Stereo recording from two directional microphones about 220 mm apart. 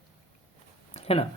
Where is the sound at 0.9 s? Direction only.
25° left (ahead or behind).